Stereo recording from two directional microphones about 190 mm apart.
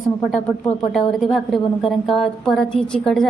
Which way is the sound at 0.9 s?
Centre (ahead or behind).